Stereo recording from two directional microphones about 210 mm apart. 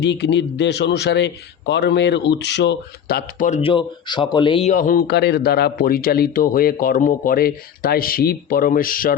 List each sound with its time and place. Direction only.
0.0 s a man's voice: 55° left (ahead or behind)